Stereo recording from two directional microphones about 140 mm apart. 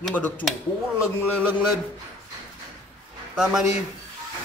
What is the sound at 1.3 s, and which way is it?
Speech, 15° right (ahead or behind).